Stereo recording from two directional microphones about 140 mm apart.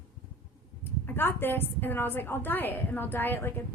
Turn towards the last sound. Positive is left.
turn(degrees=15)  # may be behind; listen again after turning